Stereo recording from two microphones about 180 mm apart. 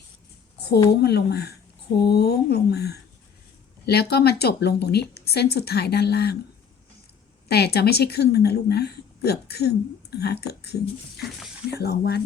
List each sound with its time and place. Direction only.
1.0 s speech: 65° left (ahead or behind)
7.4 s speech: 60° left (ahead or behind)
11.2 s speech: centre (ahead or behind)
11.7 s speech: 60° left (ahead or behind)